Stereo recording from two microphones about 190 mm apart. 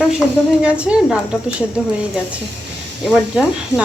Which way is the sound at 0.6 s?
5° right (ahead or behind).